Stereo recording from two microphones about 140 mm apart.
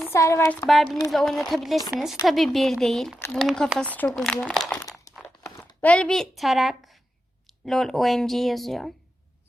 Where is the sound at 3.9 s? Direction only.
10° left (ahead or behind).